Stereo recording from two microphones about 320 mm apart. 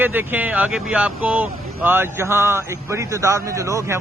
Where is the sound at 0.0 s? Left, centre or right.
Centre.